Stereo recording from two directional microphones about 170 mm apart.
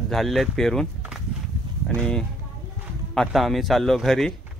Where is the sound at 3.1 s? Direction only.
Centre (ahead or behind).